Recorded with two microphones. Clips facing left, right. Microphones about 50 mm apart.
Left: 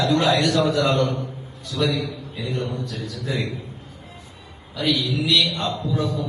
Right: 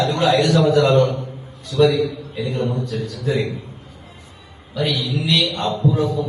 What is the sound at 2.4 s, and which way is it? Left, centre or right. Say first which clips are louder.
Speech: right 5 dB; right.